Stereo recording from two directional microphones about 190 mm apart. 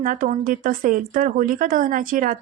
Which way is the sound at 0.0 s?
45° right (ahead or behind).